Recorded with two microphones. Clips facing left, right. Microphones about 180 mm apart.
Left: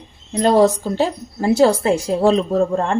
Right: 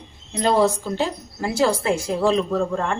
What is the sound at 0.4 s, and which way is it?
A woman's voice, 40° left (ahead or behind).